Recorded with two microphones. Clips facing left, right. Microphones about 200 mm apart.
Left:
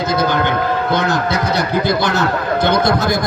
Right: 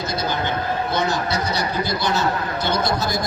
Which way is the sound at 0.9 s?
55° left (ahead or behind).